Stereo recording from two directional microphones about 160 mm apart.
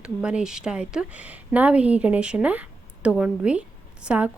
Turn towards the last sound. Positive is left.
turn(degrees=-5)  # may be behind; listen again after turning